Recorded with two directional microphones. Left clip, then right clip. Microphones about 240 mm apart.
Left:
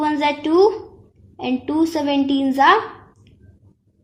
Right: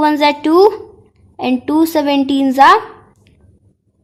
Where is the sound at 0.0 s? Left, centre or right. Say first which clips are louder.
Right 7 dB; right.